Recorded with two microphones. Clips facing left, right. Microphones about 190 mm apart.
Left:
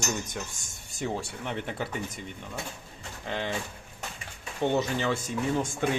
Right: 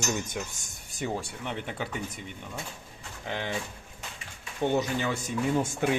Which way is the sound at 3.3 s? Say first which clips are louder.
Left 1 dB; 5° right (ahead or behind).